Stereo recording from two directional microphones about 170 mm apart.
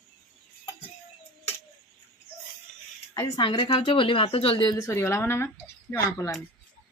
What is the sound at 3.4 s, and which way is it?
A woman's voice, 30° left (ahead or behind).